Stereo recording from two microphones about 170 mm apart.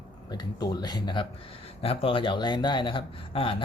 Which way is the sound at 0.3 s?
25° left (ahead or behind).